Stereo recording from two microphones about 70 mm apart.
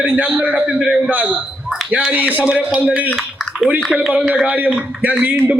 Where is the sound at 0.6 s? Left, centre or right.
Centre.